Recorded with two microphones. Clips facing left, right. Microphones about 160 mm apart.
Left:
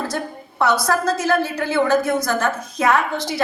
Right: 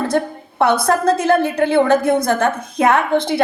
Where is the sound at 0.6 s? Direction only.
55° right (ahead or behind).